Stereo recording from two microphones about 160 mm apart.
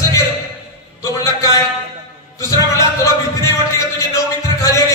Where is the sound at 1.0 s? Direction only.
20° left (ahead or behind).